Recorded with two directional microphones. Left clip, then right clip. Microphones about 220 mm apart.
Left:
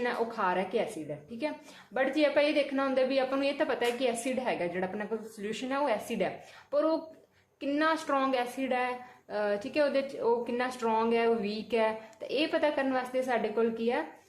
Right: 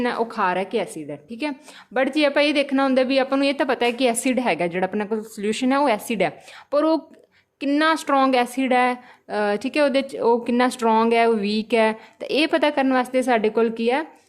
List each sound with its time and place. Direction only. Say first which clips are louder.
0.0 s a woman's voice: right 8 dB; 50° right (ahead or behind)